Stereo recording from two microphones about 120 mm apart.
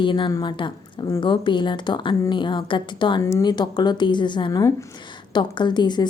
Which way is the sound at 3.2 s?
30° left (ahead or behind).